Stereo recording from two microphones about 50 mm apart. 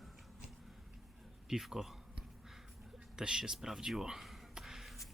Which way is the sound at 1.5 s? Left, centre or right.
Centre.